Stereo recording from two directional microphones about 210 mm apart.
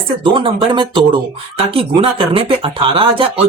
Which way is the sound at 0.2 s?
25° right (ahead or behind).